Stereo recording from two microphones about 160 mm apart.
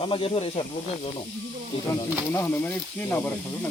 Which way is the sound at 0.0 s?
35° left (ahead or behind).